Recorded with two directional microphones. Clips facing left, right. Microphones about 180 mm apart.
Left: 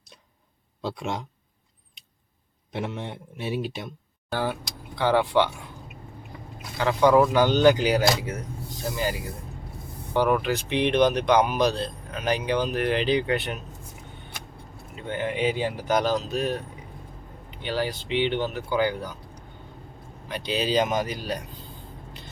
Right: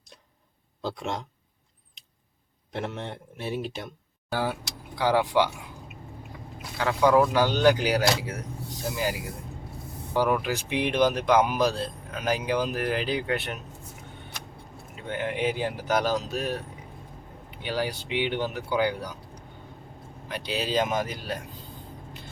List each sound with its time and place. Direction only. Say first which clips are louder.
0.8 s speech: left 1 dB; centre (ahead or behind)
2.7 s speech: left 1 dB; 5° left (ahead or behind)
4.3 s speech: left 1 dB; 10° right (ahead or behind)
6.7 s speech: left 2 dB; centre (ahead or behind)
15.1 s speech: left 2 dB; 5° right (ahead or behind)
17.6 s speech: left 1 dB; 10° right (ahead or behind)
20.2 s speech: left 3 dB; centre (ahead or behind)